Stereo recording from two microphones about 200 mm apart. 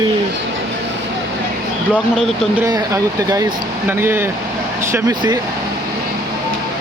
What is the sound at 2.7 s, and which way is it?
Speech, 15° right (ahead or behind).